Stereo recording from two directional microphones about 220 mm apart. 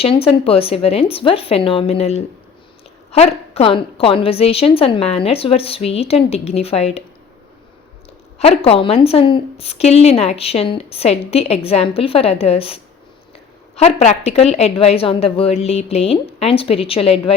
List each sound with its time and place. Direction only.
0.0 s a woman's voice: 25° left (ahead or behind)
8.4 s a woman's voice: 30° left (ahead or behind)